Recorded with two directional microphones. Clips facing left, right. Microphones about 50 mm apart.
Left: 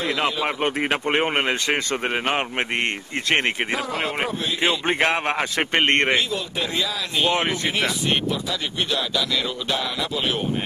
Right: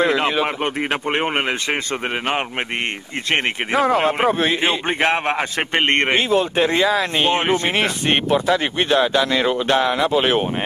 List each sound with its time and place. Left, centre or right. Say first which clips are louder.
0.6 s speech: right 1 dB; centre
3.8 s speech: right 9 dB; right
4.8 s a man's voice: right 2 dB; centre
5.9 s a man's voice: right 2 dB; right
6.1 s speech: right 7 dB; right
7.7 s speech: right 4 dB; right